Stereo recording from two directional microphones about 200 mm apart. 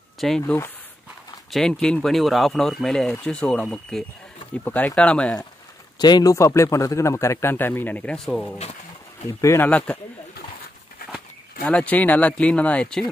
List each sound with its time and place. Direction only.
0.2 s speech: centre (ahead or behind)
5.9 s a man's voice: 20° left (ahead or behind)
11.6 s a man's voice: 5° left (ahead or behind)